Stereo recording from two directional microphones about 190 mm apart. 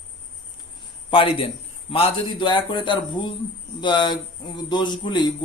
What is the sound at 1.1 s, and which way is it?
Speech, 30° left (ahead or behind).